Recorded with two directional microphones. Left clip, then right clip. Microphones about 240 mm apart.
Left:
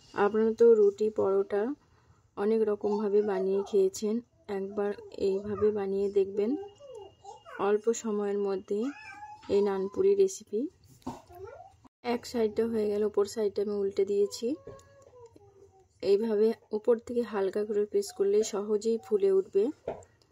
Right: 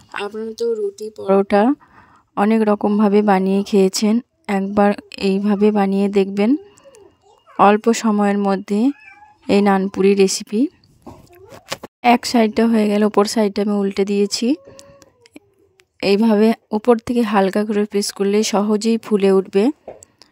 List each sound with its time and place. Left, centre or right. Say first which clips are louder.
0.2 s speech: left 1 dB; centre
1.3 s a woman's voice: right 14 dB; right
12.0 s speech: right 16 dB; right
16.0 s a woman's voice: right 10 dB; right